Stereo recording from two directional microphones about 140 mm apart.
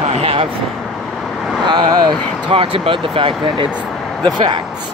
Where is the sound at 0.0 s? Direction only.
45° right (ahead or behind).